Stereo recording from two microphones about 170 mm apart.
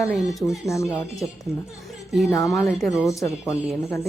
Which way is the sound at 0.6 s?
15° left (ahead or behind).